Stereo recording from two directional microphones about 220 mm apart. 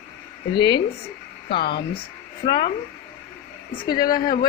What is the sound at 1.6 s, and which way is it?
Speech, 45° left (ahead or behind).